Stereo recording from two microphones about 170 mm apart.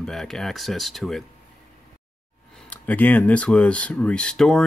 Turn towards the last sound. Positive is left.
turn(degrees=5)  # may be behind; listen again after turning